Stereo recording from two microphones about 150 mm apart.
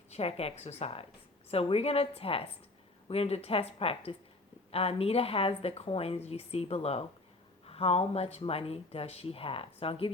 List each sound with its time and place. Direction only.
0.1 s a woman's voice: 45° left (ahead or behind)